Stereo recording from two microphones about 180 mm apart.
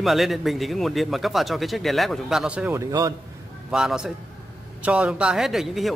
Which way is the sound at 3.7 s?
5° right (ahead or behind).